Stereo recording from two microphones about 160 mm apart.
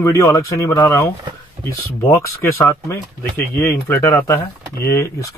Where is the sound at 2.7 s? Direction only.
20° left (ahead or behind).